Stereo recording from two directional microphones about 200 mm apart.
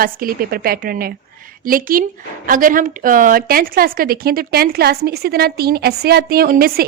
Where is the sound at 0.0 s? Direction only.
45° right (ahead or behind).